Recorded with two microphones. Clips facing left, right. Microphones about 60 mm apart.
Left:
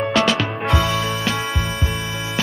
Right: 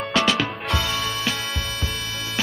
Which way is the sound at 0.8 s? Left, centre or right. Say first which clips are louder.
Left 4 dB; centre.